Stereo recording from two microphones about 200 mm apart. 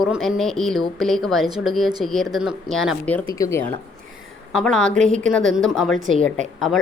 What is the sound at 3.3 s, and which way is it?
Speech, 15° left (ahead or behind).